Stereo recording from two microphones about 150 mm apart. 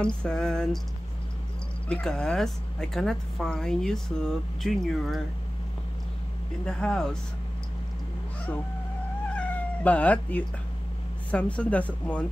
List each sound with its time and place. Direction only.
0.0 s speech: 5° left (ahead or behind)
1.9 s speech: 5° left (ahead or behind)
6.6 s speech: 5° left (ahead or behind)
9.3 s cat: 10° left (ahead or behind)
11.2 s speech: 10° left (ahead or behind)